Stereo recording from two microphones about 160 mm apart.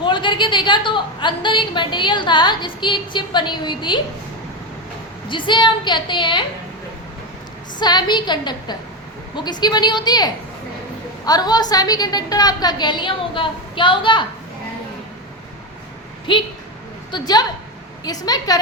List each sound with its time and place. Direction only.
0.0 s a woman's voice: 30° left (ahead or behind)
5.3 s a woman's voice: 30° left (ahead or behind)
7.8 s a woman's voice: 25° left (ahead or behind)
16.3 s a woman's voice: 30° left (ahead or behind)